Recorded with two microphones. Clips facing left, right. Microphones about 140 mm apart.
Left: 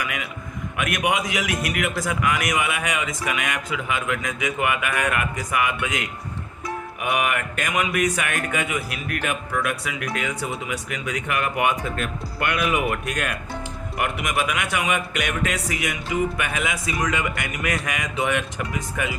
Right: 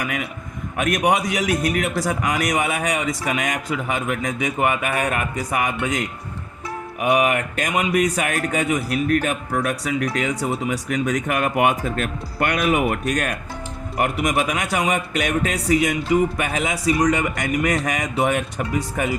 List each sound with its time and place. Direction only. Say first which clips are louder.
0.0 s speech: right 3 dB; 40° right (ahead or behind)